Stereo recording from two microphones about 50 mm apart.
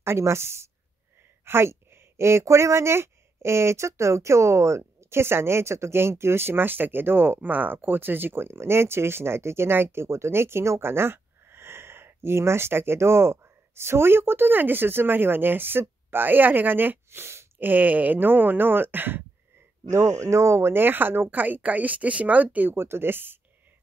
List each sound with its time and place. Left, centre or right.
0.0 s a woman's voice: right
17.6 s speech: right
19.9 s speech: right
20.8 s speech: right
21.3 s speech: right
22.7 s speech: right